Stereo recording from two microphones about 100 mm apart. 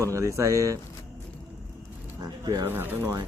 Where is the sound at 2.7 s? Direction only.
20° right (ahead or behind).